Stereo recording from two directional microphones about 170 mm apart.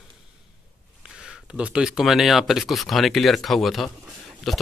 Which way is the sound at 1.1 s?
5° right (ahead or behind).